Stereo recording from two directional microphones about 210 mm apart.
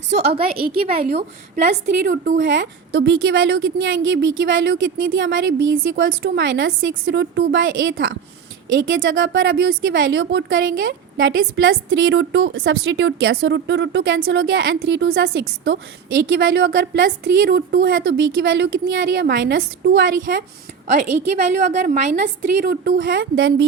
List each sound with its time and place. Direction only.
0.1 s a woman's voice: 50° right (ahead or behind)
6.1 s a woman's voice: 50° right (ahead or behind); by 23.6 s 65° right (ahead or behind)